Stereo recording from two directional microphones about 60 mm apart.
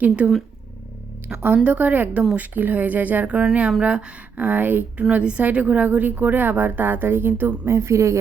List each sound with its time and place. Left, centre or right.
0.2 s a woman's voice: right; by 4.4 s centre
4.4 s a woman's voice: right
5.1 s a woman's voice: right
7.7 s a woman's voice: right